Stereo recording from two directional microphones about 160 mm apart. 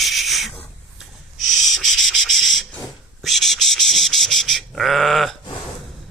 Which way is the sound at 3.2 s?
Centre (ahead or behind).